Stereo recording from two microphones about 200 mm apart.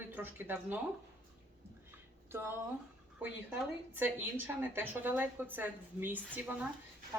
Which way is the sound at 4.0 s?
10° right (ahead or behind).